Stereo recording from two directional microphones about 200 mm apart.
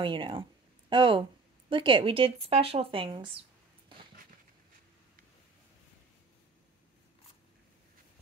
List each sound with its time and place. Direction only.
0.0 s speech: 25° right (ahead or behind)